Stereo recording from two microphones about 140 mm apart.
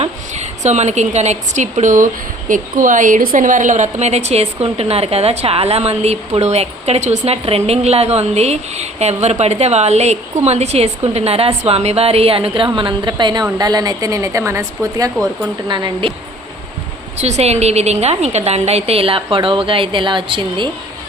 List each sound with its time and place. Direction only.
0.0 s a woman's voice: 55° right (ahead or behind); by 15.3 s 25° right (ahead or behind)
15.7 s a woman's voice: 35° right (ahead or behind)
17.2 s a woman's voice: 50° right (ahead or behind)